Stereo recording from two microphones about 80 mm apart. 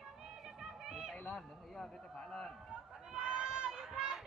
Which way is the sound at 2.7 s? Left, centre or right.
Centre.